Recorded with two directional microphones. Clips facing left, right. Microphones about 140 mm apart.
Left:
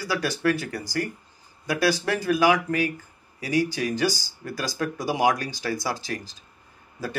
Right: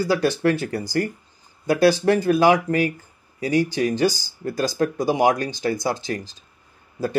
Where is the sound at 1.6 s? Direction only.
25° right (ahead or behind).